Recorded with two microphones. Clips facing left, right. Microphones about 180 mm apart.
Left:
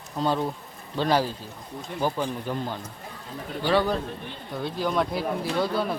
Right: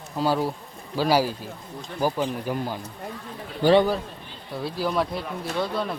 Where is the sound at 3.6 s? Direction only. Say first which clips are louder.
Right 6 dB; 45° right (ahead or behind).